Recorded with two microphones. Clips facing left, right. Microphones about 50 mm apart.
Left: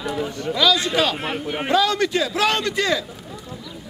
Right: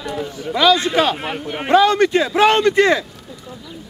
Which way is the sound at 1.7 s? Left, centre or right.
Right.